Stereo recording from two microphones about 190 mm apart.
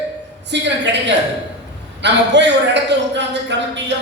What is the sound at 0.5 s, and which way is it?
A man's voice, 65° right (ahead or behind).